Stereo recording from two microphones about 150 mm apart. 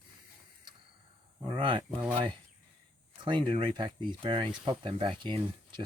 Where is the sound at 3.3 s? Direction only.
30° right (ahead or behind).